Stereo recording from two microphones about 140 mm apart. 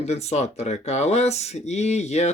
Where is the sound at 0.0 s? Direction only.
50° left (ahead or behind).